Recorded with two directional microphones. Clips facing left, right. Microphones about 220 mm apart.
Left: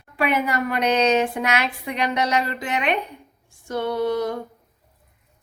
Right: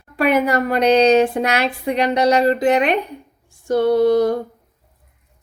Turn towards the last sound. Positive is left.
turn(degrees=-35)  # may be behind; listen again after turning